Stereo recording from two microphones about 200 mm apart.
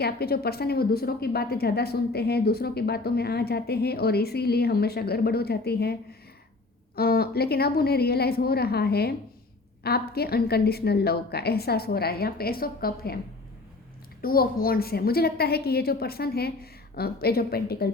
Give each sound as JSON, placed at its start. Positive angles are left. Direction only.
{"t": 0.0, "sound": "a woman's voice", "side_deg": 50}
{"t": 14.2, "sound": "a woman's voice", "side_deg": 45}